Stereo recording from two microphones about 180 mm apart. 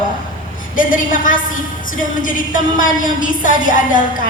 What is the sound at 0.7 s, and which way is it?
A woman's voice, 50° left (ahead or behind).